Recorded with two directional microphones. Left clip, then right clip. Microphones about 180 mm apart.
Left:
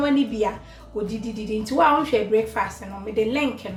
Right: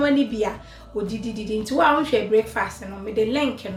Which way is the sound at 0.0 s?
10° right (ahead or behind).